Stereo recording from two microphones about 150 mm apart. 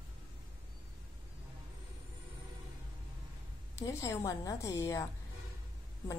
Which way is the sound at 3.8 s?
20° left (ahead or behind).